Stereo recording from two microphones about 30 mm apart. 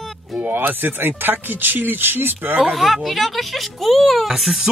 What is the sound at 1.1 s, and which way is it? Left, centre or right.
Speech, right.